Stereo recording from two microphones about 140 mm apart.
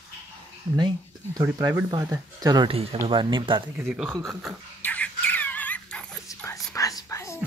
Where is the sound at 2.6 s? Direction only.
40° right (ahead or behind).